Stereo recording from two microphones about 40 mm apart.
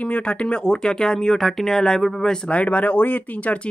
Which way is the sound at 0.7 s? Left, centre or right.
Centre.